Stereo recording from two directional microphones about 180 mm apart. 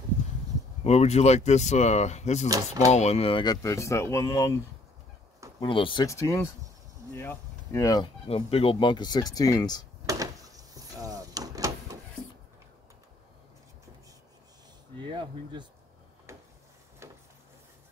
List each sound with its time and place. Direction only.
0.8 s speech: 35° left (ahead or behind)
2.4 s speech: 20° right (ahead or behind)
2.9 s speech: 35° left (ahead or behind); by 4.6 s 20° left (ahead or behind)
5.6 s speech: 30° left (ahead or behind)
6.0 s speech: 15° left (ahead or behind)
8.3 s speech: 30° left (ahead or behind)
10.0 s door: 20° right (ahead or behind)
15.0 s a sound: 25° right (ahead or behind)
17.0 s a sound: 15° right (ahead or behind)